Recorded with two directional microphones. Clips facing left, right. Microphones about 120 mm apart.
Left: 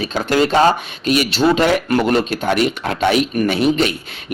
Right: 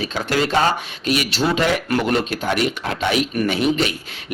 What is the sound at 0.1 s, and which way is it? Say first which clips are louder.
Speech: left 5 dB; 35° left (ahead or behind).